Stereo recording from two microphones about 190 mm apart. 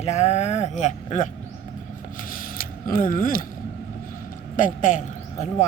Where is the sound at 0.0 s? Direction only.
35° left (ahead or behind).